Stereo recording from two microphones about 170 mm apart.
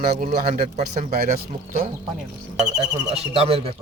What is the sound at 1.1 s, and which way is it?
Speech, 55° right (ahead or behind).